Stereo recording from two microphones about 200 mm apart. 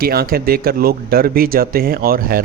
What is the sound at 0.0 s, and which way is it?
Speech, 50° right (ahead or behind).